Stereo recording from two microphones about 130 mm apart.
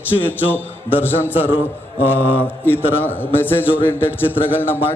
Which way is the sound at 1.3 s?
15° right (ahead or behind).